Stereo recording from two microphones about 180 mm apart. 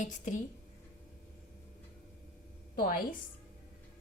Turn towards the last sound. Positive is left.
turn(degrees=55)  # may be behind; listen again after turning